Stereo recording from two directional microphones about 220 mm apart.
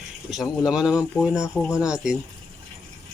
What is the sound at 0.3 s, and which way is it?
A man's voice, centre (ahead or behind).